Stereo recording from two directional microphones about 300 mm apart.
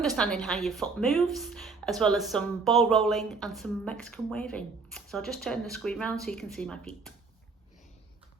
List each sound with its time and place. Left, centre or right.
0.0 s a woman's voice: centre